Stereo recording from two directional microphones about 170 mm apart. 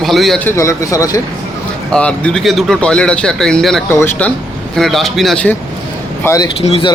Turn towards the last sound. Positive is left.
turn(degrees=35)  # may be behind; listen again after turning